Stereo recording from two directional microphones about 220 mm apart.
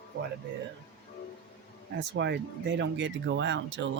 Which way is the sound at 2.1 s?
50° right (ahead or behind).